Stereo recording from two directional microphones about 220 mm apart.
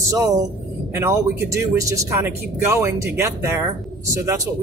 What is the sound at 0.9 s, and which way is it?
Speech, 15° right (ahead or behind).